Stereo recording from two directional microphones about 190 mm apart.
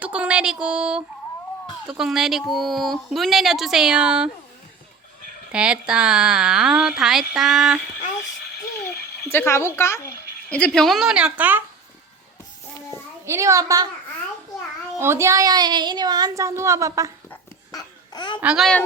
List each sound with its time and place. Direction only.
0.0 s speech: 5° right (ahead or behind)
5.5 s speech: 5° right (ahead or behind)
9.3 s speech: 10° left (ahead or behind); by 11.6 s 10° right (ahead or behind)
12.9 s a child's voice: 15° right (ahead or behind)
14.9 s speech: 15° right (ahead or behind)
17.2 s babbling: 20° left (ahead or behind)
18.4 s speech: centre (ahead or behind)